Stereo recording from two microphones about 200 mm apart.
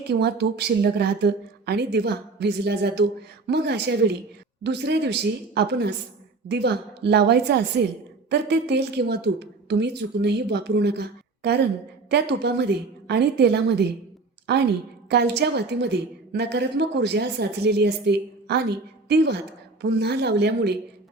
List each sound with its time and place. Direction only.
0.1 s a woman's voice: 55° right (ahead or behind)